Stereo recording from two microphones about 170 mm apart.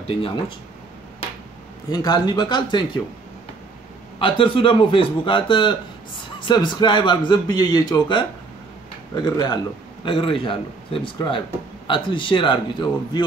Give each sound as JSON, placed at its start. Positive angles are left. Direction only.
{"t": 0.0, "sound": "speech", "side_deg": 35}
{"t": 1.9, "sound": "a man's voice", "side_deg": 25}
{"t": 4.2, "sound": "a man's voice", "side_deg": 30}